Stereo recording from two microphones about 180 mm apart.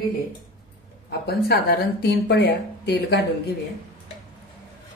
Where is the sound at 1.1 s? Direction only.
60° left (ahead or behind).